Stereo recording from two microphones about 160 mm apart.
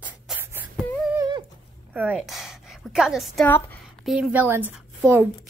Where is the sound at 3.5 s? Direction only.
10° left (ahead or behind).